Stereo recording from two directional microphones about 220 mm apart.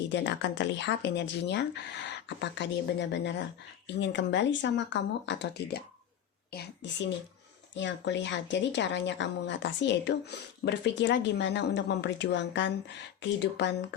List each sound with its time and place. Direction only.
0.1 s a woman's voice: 55° left (ahead or behind)